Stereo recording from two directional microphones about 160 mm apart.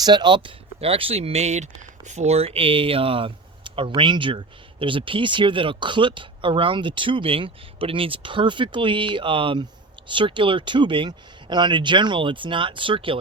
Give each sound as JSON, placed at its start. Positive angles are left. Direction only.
{"t": 0.0, "sound": "speech", "side_deg": -25}